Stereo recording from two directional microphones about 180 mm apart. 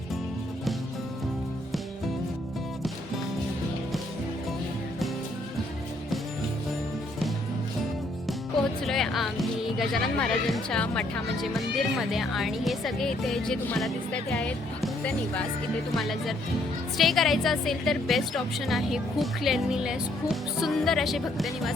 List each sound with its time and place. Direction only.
8.8 s speech: centre (ahead or behind)
16.0 s speech: centre (ahead or behind)